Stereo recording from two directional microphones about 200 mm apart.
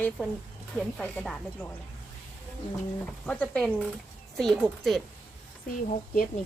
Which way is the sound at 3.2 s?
5° left (ahead or behind).